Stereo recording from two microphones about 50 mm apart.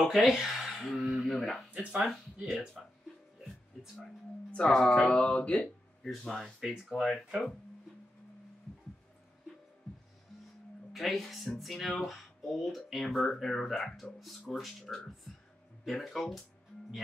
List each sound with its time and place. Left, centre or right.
0.0 s speech: centre
0.7 s a sound: centre
1.0 s speech: centre
1.3 s speech: centre
1.7 s speech: right
2.8 s speech: centre
3.9 s speech: centre
5.2 s speech: left
6.2 s speech: centre
6.6 s speech: centre
10.9 s speech: centre
16.0 s speech: centre